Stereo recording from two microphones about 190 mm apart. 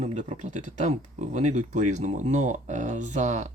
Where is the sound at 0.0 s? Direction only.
35° right (ahead or behind).